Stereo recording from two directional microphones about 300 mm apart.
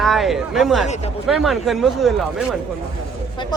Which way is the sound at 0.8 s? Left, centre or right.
Left.